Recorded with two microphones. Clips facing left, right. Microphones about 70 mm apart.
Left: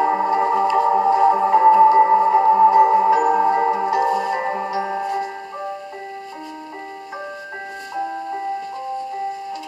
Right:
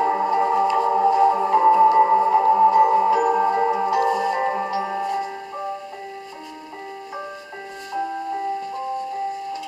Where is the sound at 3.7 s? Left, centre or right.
Centre.